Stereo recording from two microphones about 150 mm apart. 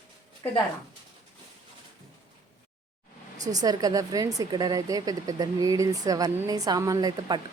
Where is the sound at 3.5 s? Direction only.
25° right (ahead or behind).